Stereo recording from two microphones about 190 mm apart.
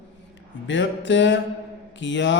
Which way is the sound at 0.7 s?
70° left (ahead or behind).